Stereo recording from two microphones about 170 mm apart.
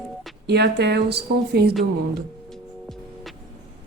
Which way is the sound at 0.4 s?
80° right.